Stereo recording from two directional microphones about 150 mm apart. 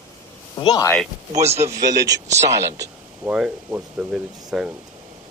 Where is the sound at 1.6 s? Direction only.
20° right (ahead or behind).